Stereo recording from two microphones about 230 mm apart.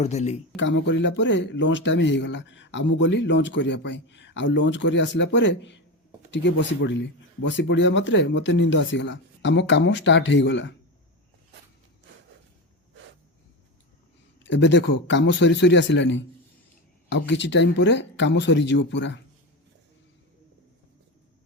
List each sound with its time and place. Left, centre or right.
0.0 s speech: left
0.5 s speech: left
14.4 s speech: left